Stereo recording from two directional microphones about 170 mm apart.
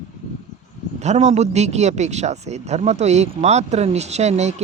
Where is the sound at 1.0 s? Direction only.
40° right (ahead or behind).